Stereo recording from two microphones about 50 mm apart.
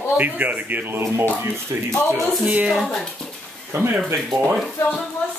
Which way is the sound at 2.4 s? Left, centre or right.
Right.